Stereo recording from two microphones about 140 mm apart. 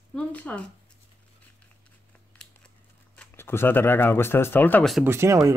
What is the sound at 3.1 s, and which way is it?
Speech, 15° left (ahead or behind).